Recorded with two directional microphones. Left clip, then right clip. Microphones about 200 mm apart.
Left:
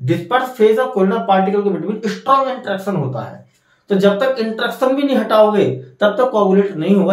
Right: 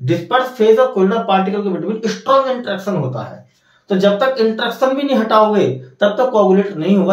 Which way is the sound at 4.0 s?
15° left (ahead or behind).